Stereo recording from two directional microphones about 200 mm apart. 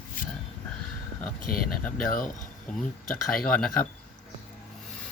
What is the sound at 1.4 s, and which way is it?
Speech, 45° left (ahead or behind).